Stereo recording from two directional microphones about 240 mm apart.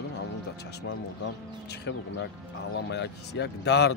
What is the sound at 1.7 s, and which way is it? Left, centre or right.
Speech, left.